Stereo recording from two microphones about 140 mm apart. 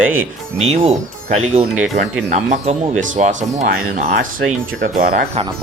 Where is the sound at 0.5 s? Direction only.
50° right (ahead or behind).